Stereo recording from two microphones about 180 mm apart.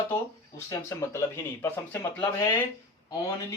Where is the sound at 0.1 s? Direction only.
15° left (ahead or behind).